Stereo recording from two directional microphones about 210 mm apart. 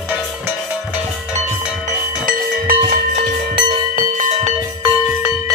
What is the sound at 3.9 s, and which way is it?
Music, 35° right (ahead or behind).